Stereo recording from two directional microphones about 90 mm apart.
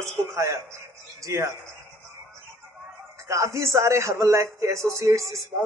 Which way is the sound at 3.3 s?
35° right (ahead or behind).